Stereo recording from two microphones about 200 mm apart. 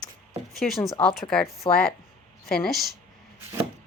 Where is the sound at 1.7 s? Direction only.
25° left (ahead or behind).